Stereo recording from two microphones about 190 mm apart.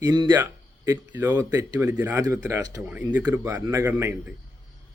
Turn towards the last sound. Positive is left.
turn(degrees=-15)  # may be behind; listen again after turning